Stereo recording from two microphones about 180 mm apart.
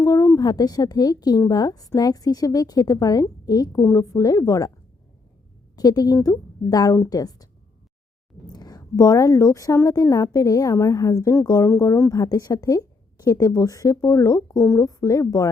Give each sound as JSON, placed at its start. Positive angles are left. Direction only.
{"t": 0.0, "sound": "a woman's voice", "side_deg": 20}
{"t": 5.7, "sound": "a woman's voice", "side_deg": 20}
{"t": 8.5, "sound": "a woman's voice", "side_deg": 20}